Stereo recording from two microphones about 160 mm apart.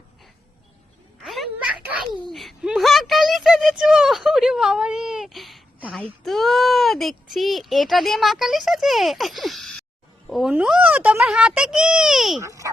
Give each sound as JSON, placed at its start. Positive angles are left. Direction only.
{"t": 1.2, "sound": "a sound", "side_deg": 0}
{"t": 10.2, "sound": "a child's voice", "side_deg": 0}
{"t": 12.4, "sound": "a child's voice", "side_deg": -20}